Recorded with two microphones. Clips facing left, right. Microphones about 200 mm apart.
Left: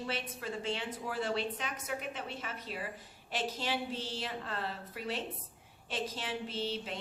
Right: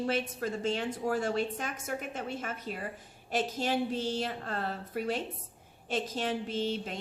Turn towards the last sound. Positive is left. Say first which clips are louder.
# right 4 dB
turn(degrees=-45)  # may be behind; listen again after turning